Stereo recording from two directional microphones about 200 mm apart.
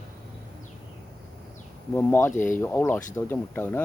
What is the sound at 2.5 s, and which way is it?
Speech, 10° left (ahead or behind).